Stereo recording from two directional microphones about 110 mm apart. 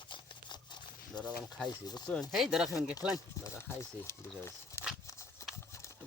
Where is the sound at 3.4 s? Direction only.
25° left (ahead or behind).